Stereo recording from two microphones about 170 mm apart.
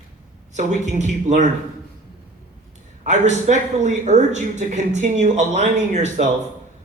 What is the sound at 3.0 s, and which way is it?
Speech, 45° right (ahead or behind).